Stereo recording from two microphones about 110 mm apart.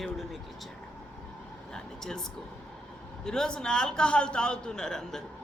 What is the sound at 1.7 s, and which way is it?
Speech, 5° left (ahead or behind).